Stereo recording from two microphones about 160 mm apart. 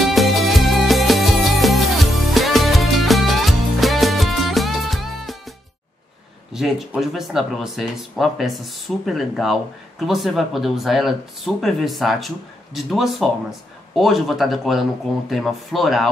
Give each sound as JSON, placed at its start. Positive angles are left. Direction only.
{"t": 0.0, "sound": "music", "side_deg": 0}
{"t": 6.5, "sound": "speech", "side_deg": 0}